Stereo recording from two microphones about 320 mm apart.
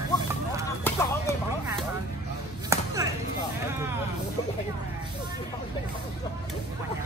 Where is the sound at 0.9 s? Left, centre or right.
Centre.